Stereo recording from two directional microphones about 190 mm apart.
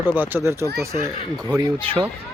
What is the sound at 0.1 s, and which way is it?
Speech, 10° right (ahead or behind).